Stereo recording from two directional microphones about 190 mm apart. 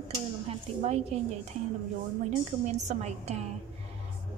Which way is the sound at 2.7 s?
35° right (ahead or behind).